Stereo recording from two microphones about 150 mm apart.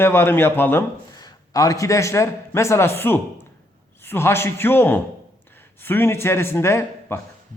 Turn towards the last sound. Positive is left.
turn(degrees=15)  # may be behind; listen again after turning